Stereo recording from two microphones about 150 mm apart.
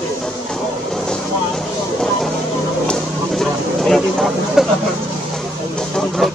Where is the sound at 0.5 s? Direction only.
5° left (ahead or behind).